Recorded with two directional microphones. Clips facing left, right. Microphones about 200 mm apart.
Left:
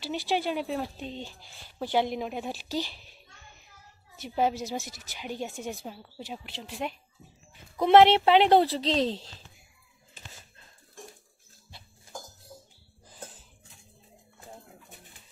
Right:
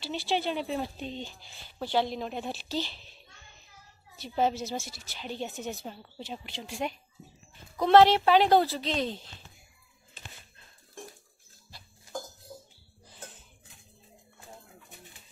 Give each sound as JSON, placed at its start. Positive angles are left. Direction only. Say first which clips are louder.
{"t": 0.0, "sound": "speech", "louder": "left 1 dB", "side_deg": 15}
{"t": 1.8, "sound": "speech", "louder": "left 2 dB", "side_deg": 15}
{"t": 4.2, "sound": "a woman's voice", "louder": "left 1 dB", "side_deg": 10}
{"t": 7.8, "sound": "speech", "louder": "left 1 dB", "side_deg": 20}